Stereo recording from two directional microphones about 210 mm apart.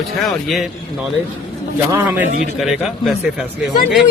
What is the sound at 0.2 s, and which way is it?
Speech, centre (ahead or behind).